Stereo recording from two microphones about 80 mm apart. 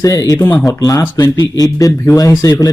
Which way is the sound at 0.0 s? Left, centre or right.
Left.